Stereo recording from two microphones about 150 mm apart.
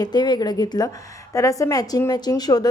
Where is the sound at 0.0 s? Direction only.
30° left (ahead or behind).